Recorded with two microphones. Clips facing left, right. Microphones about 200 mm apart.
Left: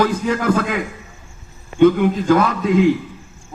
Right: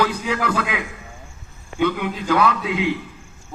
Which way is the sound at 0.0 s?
45° left (ahead or behind).